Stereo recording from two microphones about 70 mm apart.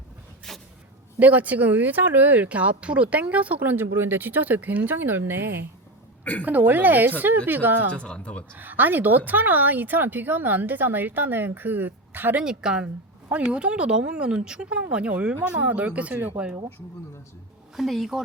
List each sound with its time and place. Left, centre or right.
0.5 s a sound: centre
1.2 s speech: right
7.9 s speech: centre
8.5 s speech: right
12.4 s speech: centre
17.7 s a woman's voice: centre